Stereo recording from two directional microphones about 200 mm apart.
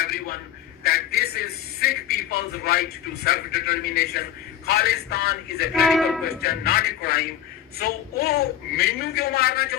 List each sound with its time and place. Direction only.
0.0 s a sound: 50° left (ahead or behind)
0.9 s a man's voice: 50° left (ahead or behind)
5.7 s speech: centre (ahead or behind)
6.2 s a man's voice: 50° left (ahead or behind)